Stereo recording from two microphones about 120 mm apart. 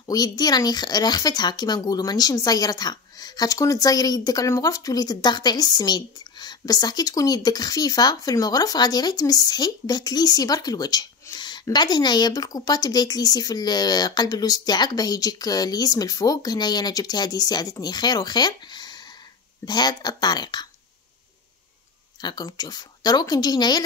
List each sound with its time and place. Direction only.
0.0 s speech: 30° left (ahead or behind)
22.2 s speech: 35° left (ahead or behind)